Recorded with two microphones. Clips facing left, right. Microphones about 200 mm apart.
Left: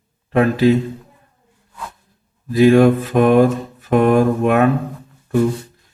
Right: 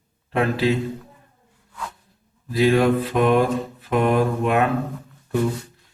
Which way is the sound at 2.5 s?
50° left (ahead or behind).